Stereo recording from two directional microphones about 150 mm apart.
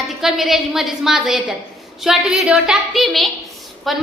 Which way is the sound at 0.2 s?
Centre (ahead or behind).